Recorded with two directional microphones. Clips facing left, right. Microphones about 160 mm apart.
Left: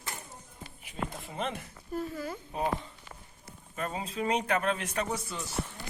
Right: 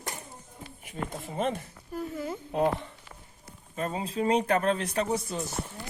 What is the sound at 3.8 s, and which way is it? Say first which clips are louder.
Speech: right 4 dB; 30° right (ahead or behind).